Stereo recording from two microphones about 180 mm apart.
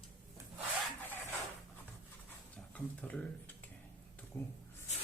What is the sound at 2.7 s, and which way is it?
Speech, 5° left (ahead or behind).